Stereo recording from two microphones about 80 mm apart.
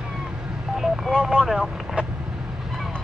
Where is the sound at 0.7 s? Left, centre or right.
Centre.